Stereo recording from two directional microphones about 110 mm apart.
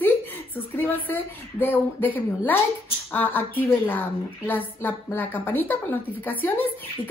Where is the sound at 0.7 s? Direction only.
15° left (ahead or behind).